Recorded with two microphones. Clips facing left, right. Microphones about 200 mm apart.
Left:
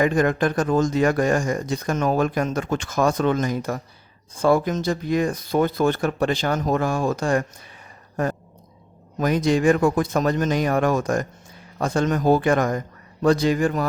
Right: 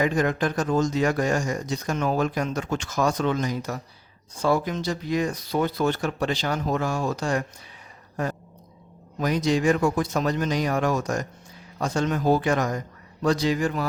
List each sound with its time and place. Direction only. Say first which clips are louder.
0.0 s speech: left 4 dB; 55° left (ahead or behind)
8.1 s a sound: left 4 dB; 50° left (ahead or behind)
9.1 s a man's voice: left 3 dB; 50° left (ahead or behind)